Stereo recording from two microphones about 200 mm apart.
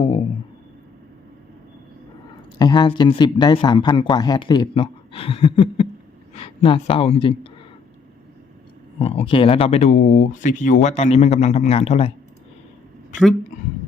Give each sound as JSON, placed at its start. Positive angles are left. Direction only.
{"t": 2.6, "sound": "speech", "side_deg": 20}
{"t": 9.0, "sound": "speech", "side_deg": 30}